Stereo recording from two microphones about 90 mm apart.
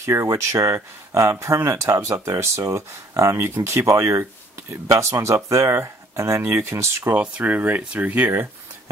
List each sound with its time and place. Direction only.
0.0 s speech: 30° right (ahead or behind)
7.2 s speech: 15° right (ahead or behind)